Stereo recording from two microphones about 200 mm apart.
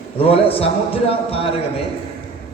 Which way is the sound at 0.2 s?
30° left (ahead or behind).